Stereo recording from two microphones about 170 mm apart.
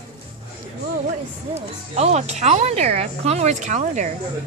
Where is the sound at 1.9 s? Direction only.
40° right (ahead or behind).